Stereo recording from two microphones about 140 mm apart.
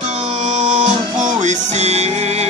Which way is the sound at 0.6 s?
60° right (ahead or behind).